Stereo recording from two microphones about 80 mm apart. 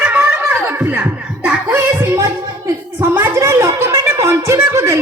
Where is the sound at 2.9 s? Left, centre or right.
Right.